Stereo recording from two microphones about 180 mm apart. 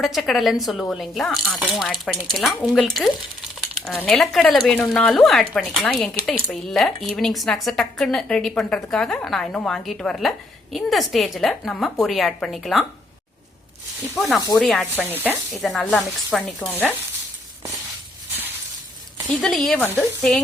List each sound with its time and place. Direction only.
0.0 s speech: centre (ahead or behind)
14.2 s speech: centre (ahead or behind)
14.9 s speech: 10° right (ahead or behind)
15.3 s speech: 5° left (ahead or behind)
19.4 s speech: centre (ahead or behind)